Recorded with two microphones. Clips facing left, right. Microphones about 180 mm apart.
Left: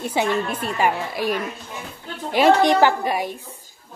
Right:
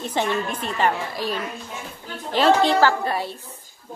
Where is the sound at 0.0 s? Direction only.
10° left (ahead or behind).